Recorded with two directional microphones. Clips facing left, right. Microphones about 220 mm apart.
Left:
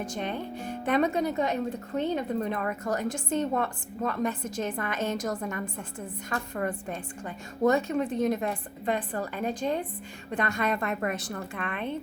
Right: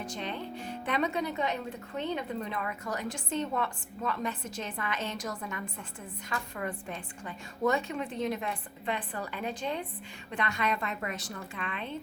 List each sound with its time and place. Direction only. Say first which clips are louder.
0.0 s a woman's voice: left 4 dB; 50° left (ahead or behind)